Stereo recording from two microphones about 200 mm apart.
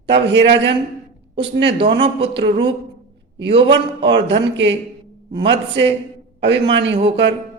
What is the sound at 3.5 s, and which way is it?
Speech, 25° right (ahead or behind).